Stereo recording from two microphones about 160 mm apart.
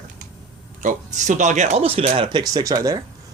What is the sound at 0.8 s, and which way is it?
Speech, 50° right (ahead or behind).